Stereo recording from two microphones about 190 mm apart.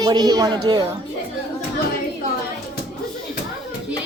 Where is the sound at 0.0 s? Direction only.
20° right (ahead or behind).